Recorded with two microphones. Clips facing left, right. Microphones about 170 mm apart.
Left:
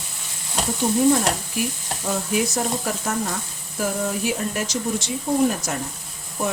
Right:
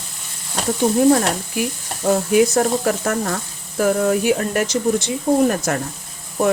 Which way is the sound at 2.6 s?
60° right (ahead or behind).